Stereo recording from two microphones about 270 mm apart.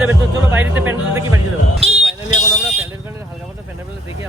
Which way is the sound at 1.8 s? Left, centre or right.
Centre.